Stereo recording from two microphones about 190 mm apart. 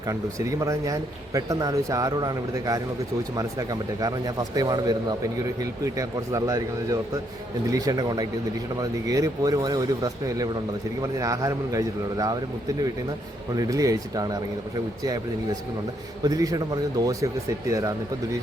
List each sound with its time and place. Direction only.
0.1 s speech: 15° right (ahead or behind)
13.6 s speech: 20° right (ahead or behind)
16.2 s speech: 20° right (ahead or behind)